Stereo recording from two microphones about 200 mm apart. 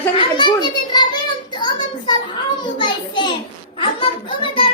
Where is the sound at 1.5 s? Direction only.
20° left (ahead or behind).